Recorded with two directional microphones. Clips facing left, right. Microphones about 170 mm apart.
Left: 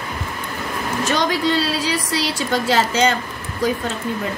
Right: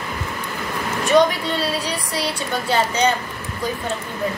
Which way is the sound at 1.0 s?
90° left.